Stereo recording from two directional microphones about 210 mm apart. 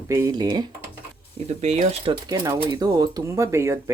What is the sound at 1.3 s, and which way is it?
Speech, 30° right (ahead or behind).